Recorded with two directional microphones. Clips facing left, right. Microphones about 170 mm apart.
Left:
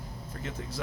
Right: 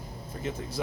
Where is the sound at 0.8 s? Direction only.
20° right (ahead or behind).